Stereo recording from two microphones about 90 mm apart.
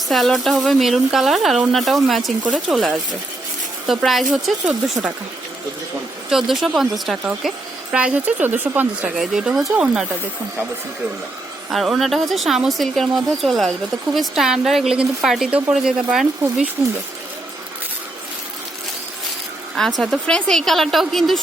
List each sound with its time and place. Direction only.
0.1 s speech: centre (ahead or behind)
6.3 s speech: 5° right (ahead or behind)
7.9 s a woman's voice: 15° right (ahead or behind)
9.1 s a woman's voice: 5° right (ahead or behind)
11.7 s a woman's voice: centre (ahead or behind)
20.0 s speech: 5° left (ahead or behind)